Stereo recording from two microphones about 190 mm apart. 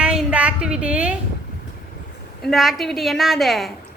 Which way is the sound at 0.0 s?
5° right (ahead or behind).